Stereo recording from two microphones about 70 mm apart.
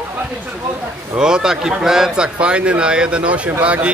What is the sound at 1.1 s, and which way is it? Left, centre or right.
Speech, centre.